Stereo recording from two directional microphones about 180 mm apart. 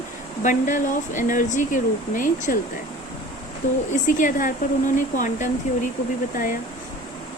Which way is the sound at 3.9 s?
45° left (ahead or behind).